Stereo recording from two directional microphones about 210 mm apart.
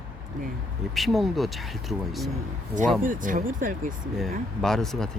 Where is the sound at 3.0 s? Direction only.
40° right (ahead or behind).